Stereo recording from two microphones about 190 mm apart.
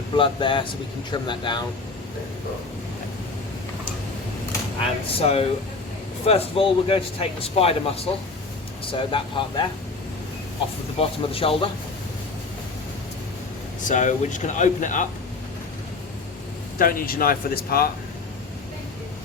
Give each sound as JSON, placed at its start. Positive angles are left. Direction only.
{"t": 0.2, "sound": "speech", "side_deg": 25}
{"t": 5.1, "sound": "speech", "side_deg": 30}
{"t": 10.9, "sound": "speech", "side_deg": 30}
{"t": 13.8, "sound": "speech", "side_deg": 40}
{"t": 16.7, "sound": "speech", "side_deg": 50}